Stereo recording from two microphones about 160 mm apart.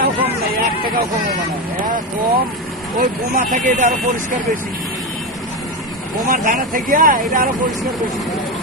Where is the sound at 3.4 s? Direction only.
55° right (ahead or behind).